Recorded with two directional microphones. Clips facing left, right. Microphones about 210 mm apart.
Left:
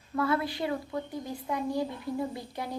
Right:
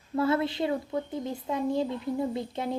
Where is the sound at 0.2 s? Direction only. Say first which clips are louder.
Right 3 dB; 25° right (ahead or behind).